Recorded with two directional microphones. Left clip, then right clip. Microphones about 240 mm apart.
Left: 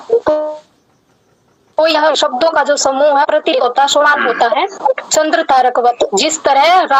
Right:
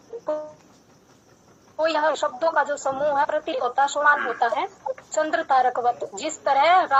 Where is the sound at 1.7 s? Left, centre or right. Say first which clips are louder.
Left 11 dB; left.